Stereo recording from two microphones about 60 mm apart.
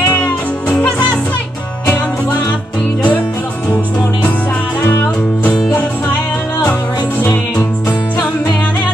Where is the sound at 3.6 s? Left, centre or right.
Left.